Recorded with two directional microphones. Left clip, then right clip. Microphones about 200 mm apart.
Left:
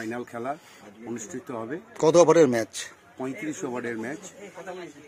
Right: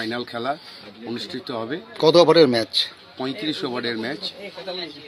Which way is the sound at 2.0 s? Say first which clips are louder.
Right 3 dB; 15° left (ahead or behind).